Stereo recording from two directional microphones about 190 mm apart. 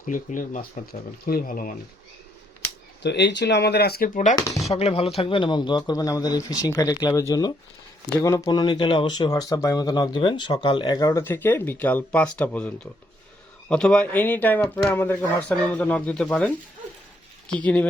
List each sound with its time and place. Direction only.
0.1 s speech: 40° left (ahead or behind)
3.0 s speech: 65° left (ahead or behind); by 4.4 s 45° left (ahead or behind)
4.4 s speech: 15° left (ahead or behind)
4.7 s speech: 35° left (ahead or behind); by 16.5 s 5° left (ahead or behind)
17.5 s speech: 5° left (ahead or behind)